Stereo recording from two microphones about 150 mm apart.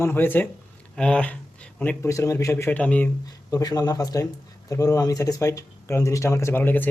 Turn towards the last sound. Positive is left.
turn(degrees=10)  # may be behind; listen again after turning